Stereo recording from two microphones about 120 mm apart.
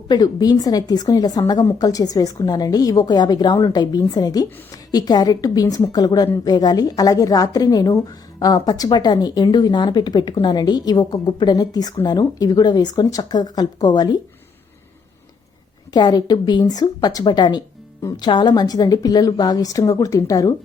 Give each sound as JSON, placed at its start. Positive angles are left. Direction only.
{"t": 0.1, "sound": "a woman's voice", "side_deg": 35}
{"t": 15.9, "sound": "a woman's voice", "side_deg": 35}